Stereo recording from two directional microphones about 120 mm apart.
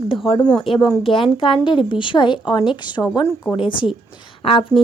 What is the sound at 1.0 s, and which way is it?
A woman's voice, 50° left (ahead or behind).